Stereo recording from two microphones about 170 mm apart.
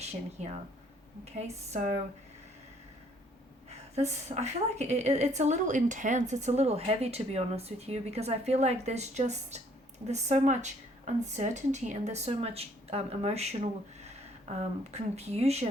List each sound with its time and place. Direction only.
0.0 s speech: 40° right (ahead or behind)
3.7 s a woman's voice: 40° right (ahead or behind)